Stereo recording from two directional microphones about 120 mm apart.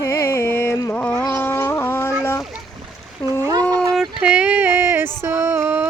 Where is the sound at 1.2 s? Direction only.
20° left (ahead or behind).